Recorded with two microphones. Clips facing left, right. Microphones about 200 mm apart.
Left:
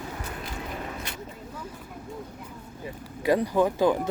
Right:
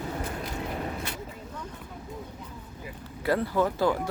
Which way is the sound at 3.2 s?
15° left (ahead or behind).